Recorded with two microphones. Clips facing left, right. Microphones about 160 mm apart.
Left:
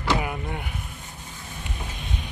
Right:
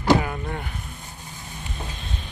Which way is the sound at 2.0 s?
15° left (ahead or behind).